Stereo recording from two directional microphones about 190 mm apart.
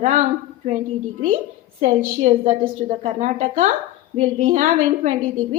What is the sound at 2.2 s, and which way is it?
Speech, 40° right (ahead or behind).